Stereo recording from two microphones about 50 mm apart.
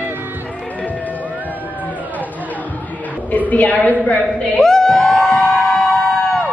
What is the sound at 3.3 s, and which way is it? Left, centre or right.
Speech, left.